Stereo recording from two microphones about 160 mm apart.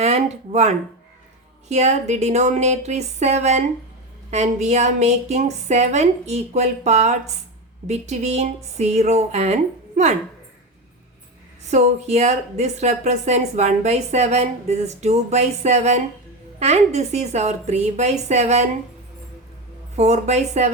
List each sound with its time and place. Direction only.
0.0 s speech: 45° right (ahead or behind)
11.7 s speech: 45° right (ahead or behind)
20.0 s speech: 45° right (ahead or behind)